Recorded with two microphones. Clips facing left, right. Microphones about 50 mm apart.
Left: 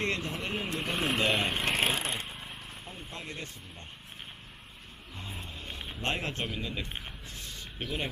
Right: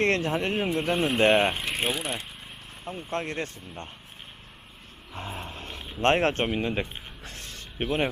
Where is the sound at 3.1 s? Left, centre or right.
Right.